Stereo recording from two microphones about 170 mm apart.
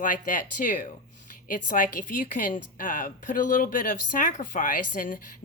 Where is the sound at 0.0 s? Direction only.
50° left (ahead or behind).